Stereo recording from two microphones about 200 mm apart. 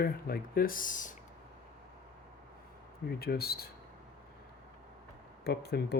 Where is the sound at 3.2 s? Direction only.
50° left (ahead or behind).